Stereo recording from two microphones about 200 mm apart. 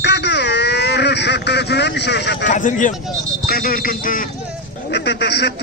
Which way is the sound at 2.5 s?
40° left (ahead or behind).